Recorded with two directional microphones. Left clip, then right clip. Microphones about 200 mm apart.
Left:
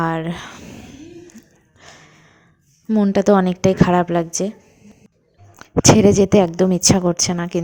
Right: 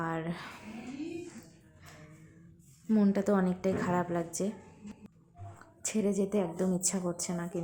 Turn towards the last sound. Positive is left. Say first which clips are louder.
# left 16 dB
turn(degrees=40)  # may be behind; listen again after turning